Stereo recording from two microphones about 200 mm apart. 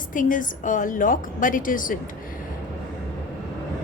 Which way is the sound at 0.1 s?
40° left (ahead or behind).